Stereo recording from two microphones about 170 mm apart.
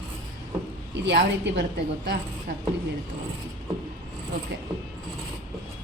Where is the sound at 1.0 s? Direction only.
90° right.